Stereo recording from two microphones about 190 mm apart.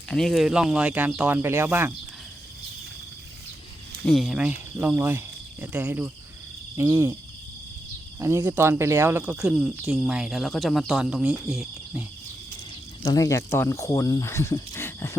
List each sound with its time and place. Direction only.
0.1 s speech: centre (ahead or behind)
4.0 s speech: centre (ahead or behind)
8.2 s speech: 15° right (ahead or behind)
13.1 s speech: 15° left (ahead or behind)